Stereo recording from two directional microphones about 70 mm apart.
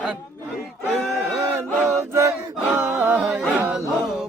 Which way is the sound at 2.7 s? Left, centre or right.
Right.